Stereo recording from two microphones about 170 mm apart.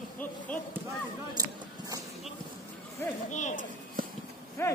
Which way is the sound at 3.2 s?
45° left (ahead or behind).